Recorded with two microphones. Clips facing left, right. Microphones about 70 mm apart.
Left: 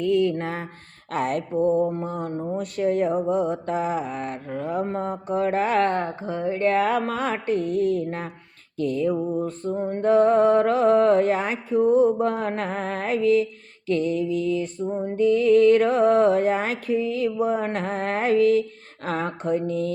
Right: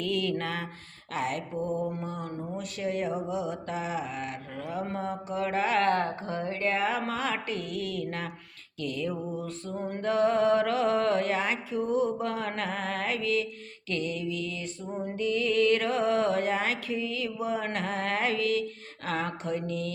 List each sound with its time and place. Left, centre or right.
0.0 s speech: left
1.1 s mantra: left
1.5 s mantra: left
5.8 s speech: left
6.6 s mantra: left
14.3 s music: right
15.2 s mantra: left